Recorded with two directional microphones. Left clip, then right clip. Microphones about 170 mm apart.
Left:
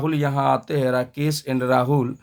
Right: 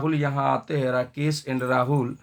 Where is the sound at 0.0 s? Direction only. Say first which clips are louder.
Left 3 dB; 40° left (ahead or behind).